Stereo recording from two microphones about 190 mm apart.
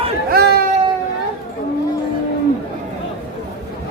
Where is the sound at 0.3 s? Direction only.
55° right (ahead or behind).